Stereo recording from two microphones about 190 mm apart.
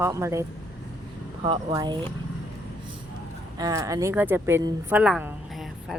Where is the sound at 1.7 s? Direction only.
20° right (ahead or behind).